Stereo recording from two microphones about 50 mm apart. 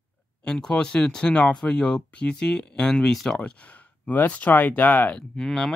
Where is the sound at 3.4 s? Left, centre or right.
Left.